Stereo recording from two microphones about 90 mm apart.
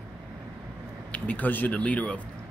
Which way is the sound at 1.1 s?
15° left (ahead or behind).